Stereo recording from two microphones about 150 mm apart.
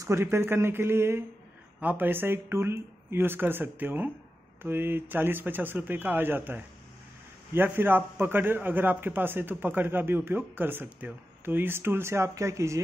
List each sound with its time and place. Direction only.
0.0 s a man's voice: 15° right (ahead or behind)